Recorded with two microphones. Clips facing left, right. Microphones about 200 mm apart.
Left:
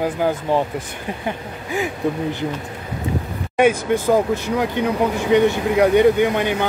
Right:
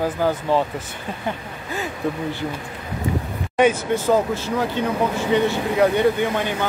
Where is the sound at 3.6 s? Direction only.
10° left (ahead or behind).